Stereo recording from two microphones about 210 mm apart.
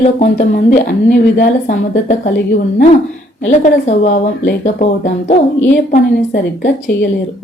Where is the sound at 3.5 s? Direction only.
35° left (ahead or behind).